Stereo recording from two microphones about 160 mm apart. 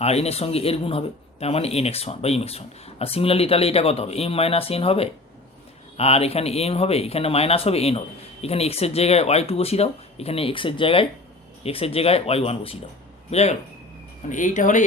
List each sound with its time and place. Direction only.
0.0 s a man's voice: 40° left (ahead or behind)